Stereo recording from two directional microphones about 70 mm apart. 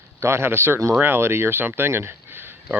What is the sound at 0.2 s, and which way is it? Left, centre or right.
Speech, right.